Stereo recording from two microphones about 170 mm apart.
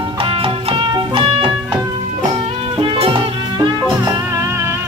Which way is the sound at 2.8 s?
30° right (ahead or behind).